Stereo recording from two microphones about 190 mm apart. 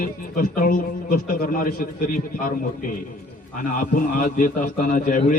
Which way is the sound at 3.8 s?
45° left (ahead or behind).